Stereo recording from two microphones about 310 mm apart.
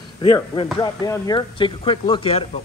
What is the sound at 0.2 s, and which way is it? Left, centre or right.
Speech, centre.